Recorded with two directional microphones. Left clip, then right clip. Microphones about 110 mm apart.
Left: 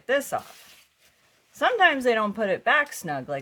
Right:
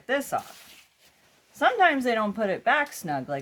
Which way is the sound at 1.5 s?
50° left (ahead or behind).